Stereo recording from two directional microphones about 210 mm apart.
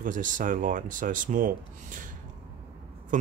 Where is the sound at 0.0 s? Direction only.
40° right (ahead or behind).